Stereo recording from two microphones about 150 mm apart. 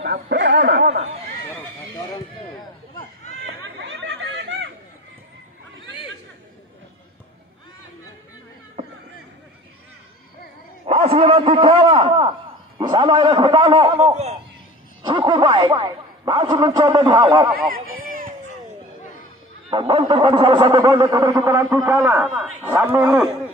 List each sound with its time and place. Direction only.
0.1 s speech: 90° right
0.9 s speech: 45° right (ahead or behind)
10.9 s a sound: 40° right (ahead or behind)
15.0 s speech: 35° right (ahead or behind)
17.6 s speech: 70° right (ahead or behind)
19.7 s speech: 35° right (ahead or behind); by 23.2 s 15° right (ahead or behind)